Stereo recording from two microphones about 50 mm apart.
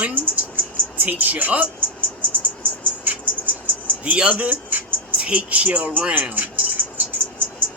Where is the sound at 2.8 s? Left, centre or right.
Right.